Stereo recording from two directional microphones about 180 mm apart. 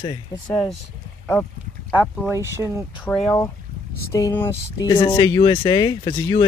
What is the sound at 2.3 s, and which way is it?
Speech, 15° right (ahead or behind).